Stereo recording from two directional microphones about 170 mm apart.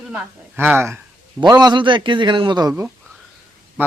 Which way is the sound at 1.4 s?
25° right (ahead or behind).